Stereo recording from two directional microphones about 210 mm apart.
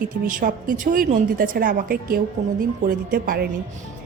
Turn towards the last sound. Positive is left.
turn(degrees=-45)  # may be behind; listen again after turning